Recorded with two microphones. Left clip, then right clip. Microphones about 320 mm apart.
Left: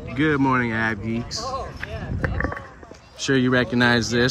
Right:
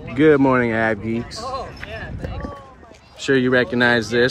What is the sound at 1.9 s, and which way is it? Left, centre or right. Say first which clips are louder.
Vehicle: left 1 dB; right.